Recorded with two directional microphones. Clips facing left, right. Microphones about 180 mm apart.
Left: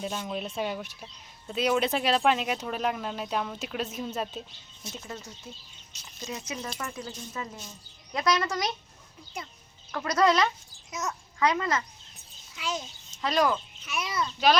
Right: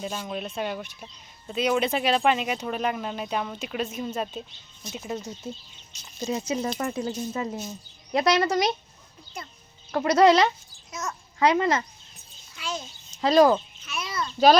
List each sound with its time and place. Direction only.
0.0 s speech: centre (ahead or behind)
4.9 s speech: 20° right (ahead or behind)
6.1 s speech: 30° right (ahead or behind)
9.9 s speech: 25° right (ahead or behind)
10.9 s a child's voice: 15° left (ahead or behind)
11.3 s speech: 30° right (ahead or behind)
12.5 s a child's voice: 15° left (ahead or behind)
13.2 s speech: 35° right (ahead or behind)
13.8 s a child's voice: 15° left (ahead or behind)
14.3 s speech: 35° right (ahead or behind)